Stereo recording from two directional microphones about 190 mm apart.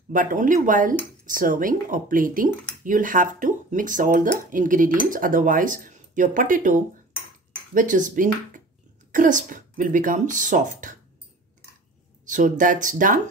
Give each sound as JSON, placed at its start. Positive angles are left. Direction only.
{"t": 0.1, "sound": "speech", "side_deg": -45}
{"t": 12.3, "sound": "speech", "side_deg": -45}